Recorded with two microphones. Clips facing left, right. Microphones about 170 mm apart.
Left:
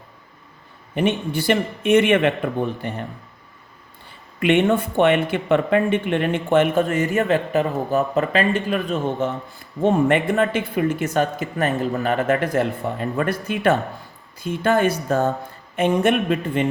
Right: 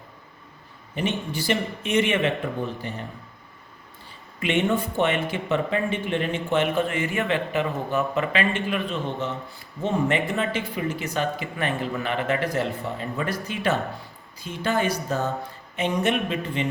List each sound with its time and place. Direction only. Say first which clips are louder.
0.9 s speech: left 6 dB; 55° left (ahead or behind)
4.4 s speech: left 6 dB; 60° left (ahead or behind)
9.8 s speech: left 6 dB; 55° left (ahead or behind)